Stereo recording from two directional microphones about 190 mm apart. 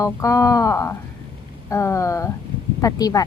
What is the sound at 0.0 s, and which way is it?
Speech, 15° left (ahead or behind).